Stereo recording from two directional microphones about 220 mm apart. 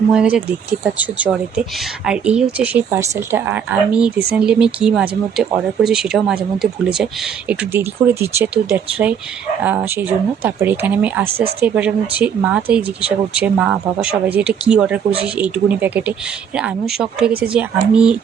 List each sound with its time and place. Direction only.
0.1 s speech: 5° right (ahead or behind)
11.3 s speech: 25° right (ahead or behind)
11.6 s speech: 5° right (ahead or behind)